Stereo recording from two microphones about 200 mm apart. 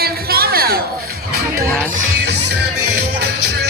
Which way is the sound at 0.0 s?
50° right (ahead or behind).